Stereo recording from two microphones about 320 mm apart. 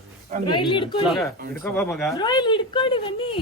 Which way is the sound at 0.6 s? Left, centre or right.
Centre.